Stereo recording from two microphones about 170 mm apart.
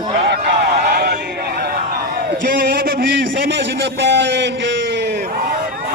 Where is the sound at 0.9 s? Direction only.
75° right (ahead or behind).